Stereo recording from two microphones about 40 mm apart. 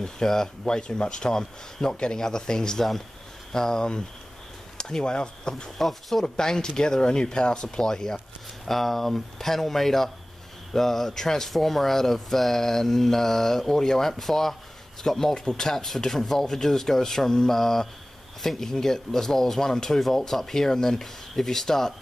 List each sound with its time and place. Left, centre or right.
0.0 s speech: centre
5.8 s speech: centre
6.2 s speech: centre
8.6 s speech: centre